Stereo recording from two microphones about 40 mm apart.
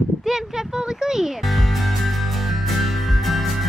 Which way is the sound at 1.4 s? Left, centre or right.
Centre.